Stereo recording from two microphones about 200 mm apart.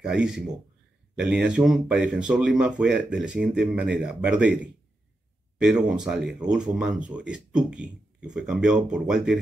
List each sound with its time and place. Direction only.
0.0 s speech: 5° right (ahead or behind)
5.6 s speech: 5° right (ahead or behind)